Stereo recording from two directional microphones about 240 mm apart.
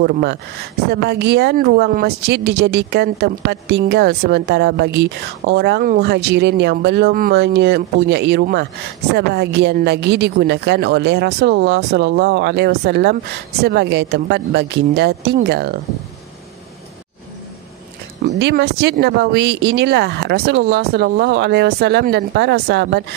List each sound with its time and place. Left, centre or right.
0.0 s a woman's voice: right
18.3 s a woman's voice: right